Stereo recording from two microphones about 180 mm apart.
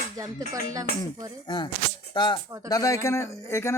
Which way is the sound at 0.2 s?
20° right (ahead or behind).